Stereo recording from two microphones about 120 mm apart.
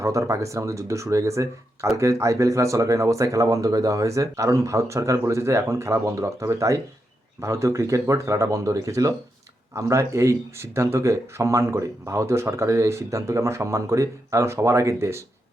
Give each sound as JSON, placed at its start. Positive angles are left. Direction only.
{"t": 0.0, "sound": "speech", "side_deg": -25}